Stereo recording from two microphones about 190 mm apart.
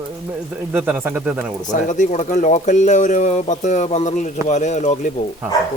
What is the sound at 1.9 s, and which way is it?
Speech, 40° left (ahead or behind).